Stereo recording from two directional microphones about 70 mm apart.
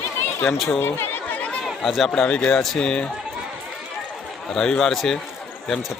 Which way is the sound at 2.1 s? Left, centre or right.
Centre.